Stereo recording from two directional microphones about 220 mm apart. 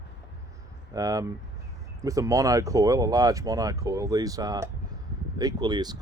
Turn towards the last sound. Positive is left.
turn(degrees=-20)  # may be behind; listen again after turning